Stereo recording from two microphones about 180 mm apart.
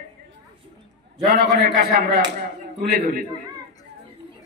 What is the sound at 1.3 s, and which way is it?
A man's voice, 55° right (ahead or behind).